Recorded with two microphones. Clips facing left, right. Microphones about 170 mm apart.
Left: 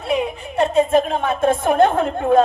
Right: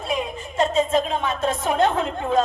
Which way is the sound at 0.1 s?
65° left (ahead or behind).